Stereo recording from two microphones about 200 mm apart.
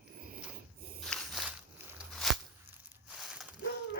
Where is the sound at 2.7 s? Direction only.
5° right (ahead or behind).